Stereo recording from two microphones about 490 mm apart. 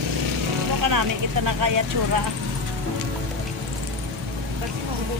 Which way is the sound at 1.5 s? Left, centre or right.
Right.